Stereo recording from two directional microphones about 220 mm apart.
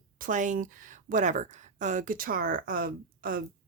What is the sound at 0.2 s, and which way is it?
A woman's voice, 35° right (ahead or behind).